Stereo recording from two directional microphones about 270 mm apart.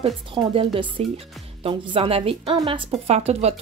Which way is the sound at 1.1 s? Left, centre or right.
Right.